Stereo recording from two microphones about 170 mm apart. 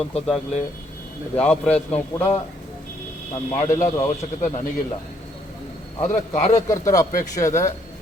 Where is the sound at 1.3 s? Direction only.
10° left (ahead or behind).